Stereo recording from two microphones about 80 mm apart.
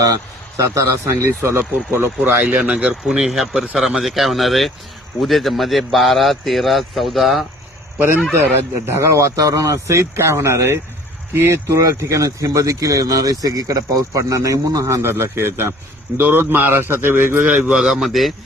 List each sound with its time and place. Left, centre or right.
0.0 s a man's voice: right
1.0 s speech: right
2.6 s a man's voice: centre
8.9 s speech: right
17.5 s speech: centre